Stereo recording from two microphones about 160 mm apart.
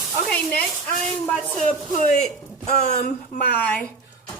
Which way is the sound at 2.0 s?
50° left (ahead or behind).